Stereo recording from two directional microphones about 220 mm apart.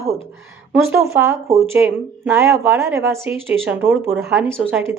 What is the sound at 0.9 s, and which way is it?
A woman's voice, 10° right (ahead or behind).